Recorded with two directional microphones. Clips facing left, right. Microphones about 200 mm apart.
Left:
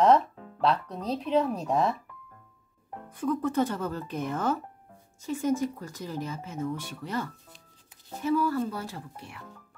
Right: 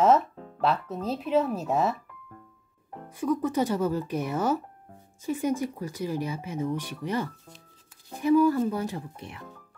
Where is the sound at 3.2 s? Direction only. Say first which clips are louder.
Right 1 dB; 10° right (ahead or behind).